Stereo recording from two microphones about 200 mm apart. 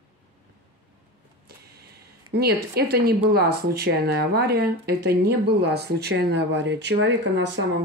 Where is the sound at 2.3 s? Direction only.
50° right (ahead or behind).